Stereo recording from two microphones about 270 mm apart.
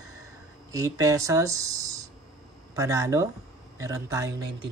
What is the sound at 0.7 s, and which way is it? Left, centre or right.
Speech, centre.